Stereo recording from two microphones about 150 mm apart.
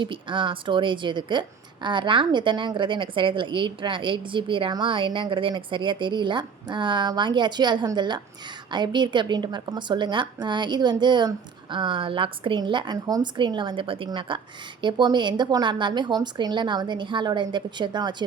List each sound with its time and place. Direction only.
0.0 s a woman's voice: 35° right (ahead or behind)